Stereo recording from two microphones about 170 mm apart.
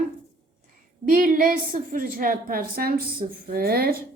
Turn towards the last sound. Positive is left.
turn(degrees=-65)  # may be behind; listen again after turning